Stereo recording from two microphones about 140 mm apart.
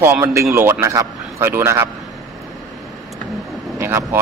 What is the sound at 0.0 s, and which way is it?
A man's voice, 20° right (ahead or behind).